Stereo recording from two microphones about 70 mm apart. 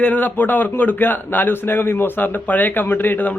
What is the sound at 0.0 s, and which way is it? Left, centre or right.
A man's voice, left.